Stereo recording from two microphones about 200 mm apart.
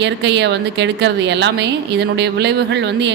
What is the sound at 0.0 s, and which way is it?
A woman's voice, 60° right (ahead or behind).